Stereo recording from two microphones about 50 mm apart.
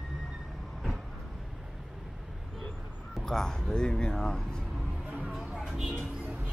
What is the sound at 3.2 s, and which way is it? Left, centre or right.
Speech, centre.